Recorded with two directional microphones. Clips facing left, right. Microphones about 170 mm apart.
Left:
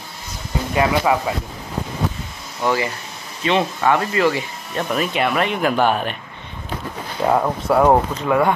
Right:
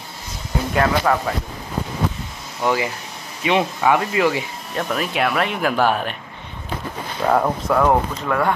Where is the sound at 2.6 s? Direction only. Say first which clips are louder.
Even; 10° right (ahead or behind).